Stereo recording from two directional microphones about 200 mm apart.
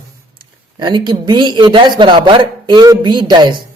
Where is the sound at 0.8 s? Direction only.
20° right (ahead or behind).